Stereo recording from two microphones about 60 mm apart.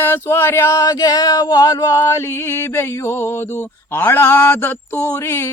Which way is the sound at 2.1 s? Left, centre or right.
Left.